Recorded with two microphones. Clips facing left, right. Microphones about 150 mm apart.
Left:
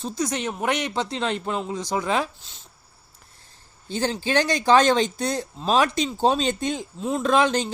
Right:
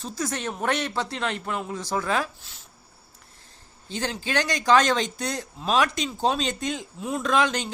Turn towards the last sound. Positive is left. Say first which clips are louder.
# left 3 dB
turn(degrees=30)  # may be behind; listen again after turning